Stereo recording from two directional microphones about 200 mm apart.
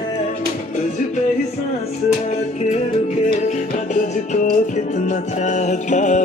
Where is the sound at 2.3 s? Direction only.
35° left (ahead or behind).